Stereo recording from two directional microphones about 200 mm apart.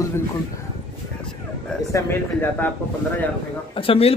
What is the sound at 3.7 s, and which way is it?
Speech, 25° left (ahead or behind).